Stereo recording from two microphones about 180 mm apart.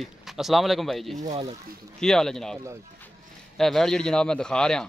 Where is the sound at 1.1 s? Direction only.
40° right (ahead or behind).